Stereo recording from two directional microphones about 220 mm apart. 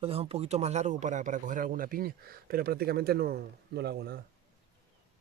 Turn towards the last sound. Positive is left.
turn(degrees=-45)  # may be behind; listen again after turning